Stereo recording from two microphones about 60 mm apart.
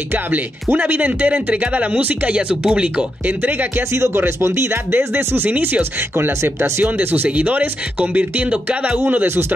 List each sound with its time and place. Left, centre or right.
0.1 s speech: right
3.9 s speech: right